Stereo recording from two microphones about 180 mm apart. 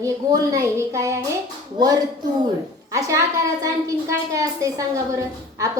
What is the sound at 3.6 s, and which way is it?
A woman's voice, 20° right (ahead or behind).